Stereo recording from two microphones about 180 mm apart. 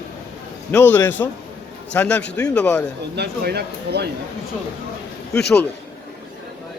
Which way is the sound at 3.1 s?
65° right (ahead or behind).